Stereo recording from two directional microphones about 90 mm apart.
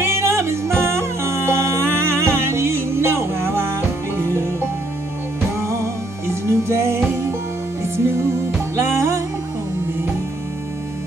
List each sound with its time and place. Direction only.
0.2 s music: 30° right (ahead or behind)
6.4 s music: 30° right (ahead or behind)